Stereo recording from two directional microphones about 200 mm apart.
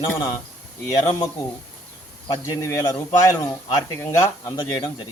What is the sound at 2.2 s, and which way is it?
Speech, 15° left (ahead or behind).